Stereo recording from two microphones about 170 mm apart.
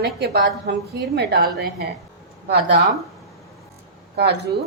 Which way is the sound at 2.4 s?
75° right (ahead or behind).